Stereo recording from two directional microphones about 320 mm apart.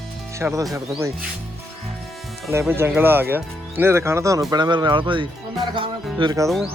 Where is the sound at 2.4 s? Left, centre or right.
Centre.